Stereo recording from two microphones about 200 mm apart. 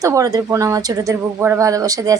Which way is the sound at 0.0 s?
15° right (ahead or behind).